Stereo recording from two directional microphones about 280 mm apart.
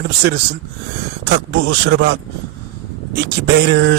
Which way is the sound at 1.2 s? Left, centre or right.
Right.